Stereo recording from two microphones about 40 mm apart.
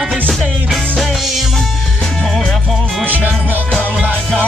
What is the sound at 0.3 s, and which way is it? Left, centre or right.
Music, centre.